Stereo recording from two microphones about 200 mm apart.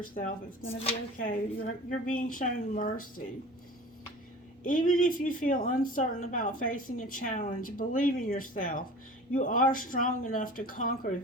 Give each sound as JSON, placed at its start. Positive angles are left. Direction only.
{"t": 0.0, "sound": "a woman's voice", "side_deg": 45}
{"t": 0.6, "sound": "speech", "side_deg": 30}
{"t": 1.2, "sound": "a woman's voice", "side_deg": 40}
{"t": 4.6, "sound": "a woman's voice", "side_deg": 40}